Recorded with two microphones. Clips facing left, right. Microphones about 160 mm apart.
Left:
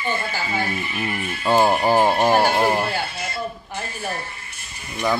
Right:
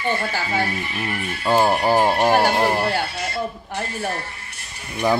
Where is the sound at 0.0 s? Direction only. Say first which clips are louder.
Right 2 dB; 70° right (ahead or behind).